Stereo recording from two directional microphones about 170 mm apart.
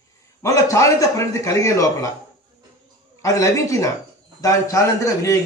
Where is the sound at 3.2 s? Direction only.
15° left (ahead or behind).